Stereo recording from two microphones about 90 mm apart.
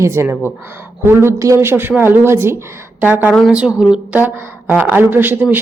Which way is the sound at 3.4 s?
5° right (ahead or behind).